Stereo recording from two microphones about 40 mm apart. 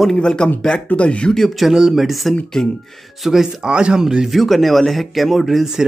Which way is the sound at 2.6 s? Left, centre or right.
Centre.